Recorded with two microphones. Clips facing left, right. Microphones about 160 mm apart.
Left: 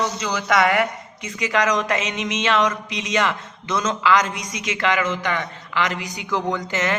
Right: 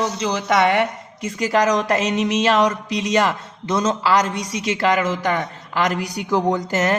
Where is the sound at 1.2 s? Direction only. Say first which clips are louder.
Right 3 dB; 40° right (ahead or behind).